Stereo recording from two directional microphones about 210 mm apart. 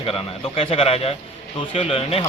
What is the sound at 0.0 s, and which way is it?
A man's voice, 25° left (ahead or behind).